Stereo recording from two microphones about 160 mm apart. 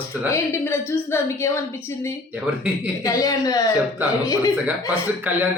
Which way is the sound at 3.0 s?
20° left (ahead or behind).